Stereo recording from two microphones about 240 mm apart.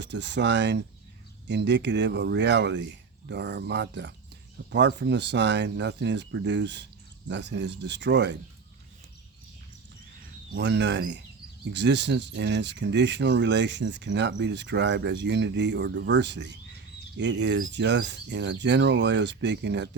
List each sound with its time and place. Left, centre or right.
0.0 s speech: right
10.5 s speech: right